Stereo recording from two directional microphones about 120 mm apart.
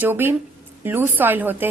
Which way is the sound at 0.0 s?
15° right (ahead or behind).